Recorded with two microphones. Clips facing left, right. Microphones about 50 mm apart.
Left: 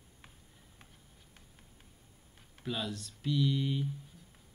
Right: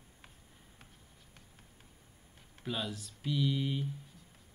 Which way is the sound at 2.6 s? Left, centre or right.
Centre.